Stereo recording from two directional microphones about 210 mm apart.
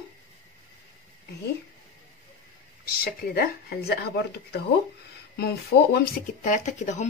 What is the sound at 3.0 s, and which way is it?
Speech, 45° left (ahead or behind).